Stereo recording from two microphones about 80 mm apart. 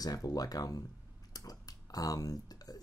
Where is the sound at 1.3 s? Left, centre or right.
Left.